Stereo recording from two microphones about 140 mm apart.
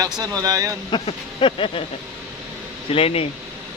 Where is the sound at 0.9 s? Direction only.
40° left (ahead or behind).